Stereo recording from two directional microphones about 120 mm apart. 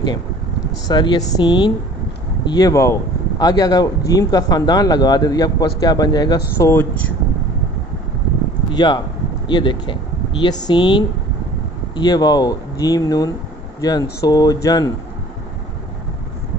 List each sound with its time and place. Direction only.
0.8 s speech: 35° left (ahead or behind)
8.6 s speech: 40° left (ahead or behind)